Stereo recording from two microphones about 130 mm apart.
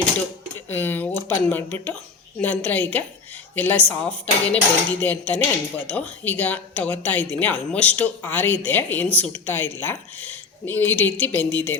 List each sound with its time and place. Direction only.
0.7 s speech: 15° left (ahead or behind)